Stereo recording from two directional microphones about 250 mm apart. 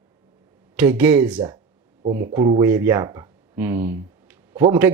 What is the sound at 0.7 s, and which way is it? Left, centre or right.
Speech, centre.